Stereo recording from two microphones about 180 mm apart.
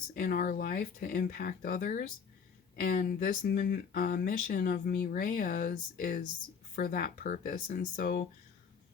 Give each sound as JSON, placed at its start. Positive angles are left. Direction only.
{"t": 0.2, "sound": "speech", "side_deg": 50}